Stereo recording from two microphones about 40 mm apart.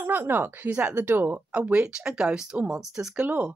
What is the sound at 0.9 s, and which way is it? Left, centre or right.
Speech, right.